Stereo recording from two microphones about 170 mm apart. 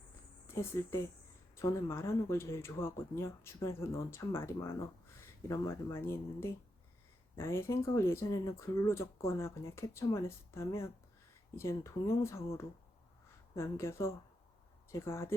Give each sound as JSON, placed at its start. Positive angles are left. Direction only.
{"t": 0.4, "sound": "speech", "side_deg": 15}